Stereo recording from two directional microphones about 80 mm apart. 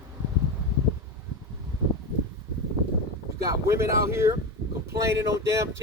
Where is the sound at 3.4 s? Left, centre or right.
Right.